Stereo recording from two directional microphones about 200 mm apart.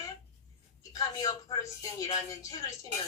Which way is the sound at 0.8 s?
20° left (ahead or behind).